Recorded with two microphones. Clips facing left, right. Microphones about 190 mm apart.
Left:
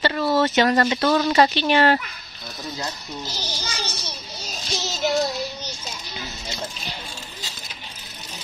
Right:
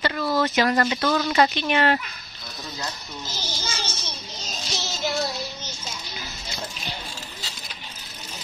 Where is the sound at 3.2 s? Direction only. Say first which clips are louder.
Right 1 dB; 15° left (ahead or behind).